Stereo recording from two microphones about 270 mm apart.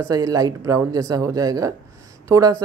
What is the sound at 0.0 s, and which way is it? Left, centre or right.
Speech, centre.